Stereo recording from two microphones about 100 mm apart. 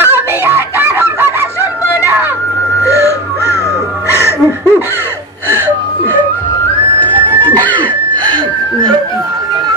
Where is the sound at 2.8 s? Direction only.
30° left (ahead or behind).